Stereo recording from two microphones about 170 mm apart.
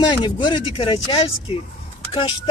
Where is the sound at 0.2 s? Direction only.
30° left (ahead or behind).